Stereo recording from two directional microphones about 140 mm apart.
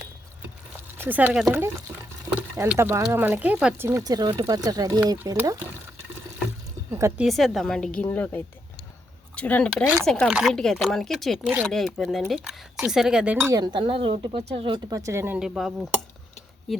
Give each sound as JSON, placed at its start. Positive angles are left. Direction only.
{"t": 0.9, "sound": "speech", "side_deg": -10}
{"t": 3.8, "sound": "speech", "side_deg": -25}
{"t": 7.2, "sound": "speech", "side_deg": 0}
{"t": 13.5, "sound": "speech", "side_deg": -30}
{"t": 15.4, "sound": "speech", "side_deg": -5}